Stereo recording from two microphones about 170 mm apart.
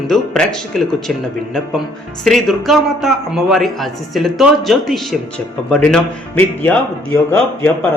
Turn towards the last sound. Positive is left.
turn(degrees=15)  # may be behind; listen again after turning